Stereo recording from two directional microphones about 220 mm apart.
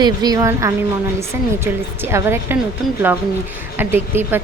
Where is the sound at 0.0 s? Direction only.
20° right (ahead or behind).